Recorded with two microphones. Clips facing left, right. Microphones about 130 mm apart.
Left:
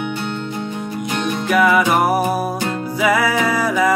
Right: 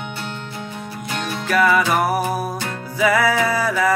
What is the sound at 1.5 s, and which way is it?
Music, 10° left (ahead or behind).